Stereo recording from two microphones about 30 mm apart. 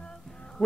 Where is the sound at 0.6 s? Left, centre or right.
Centre.